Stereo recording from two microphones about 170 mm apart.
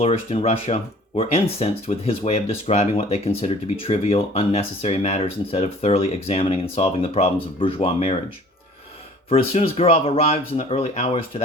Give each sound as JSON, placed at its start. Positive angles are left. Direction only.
{"t": 0.0, "sound": "speech", "side_deg": 35}
{"t": 9.3, "sound": "speech", "side_deg": 40}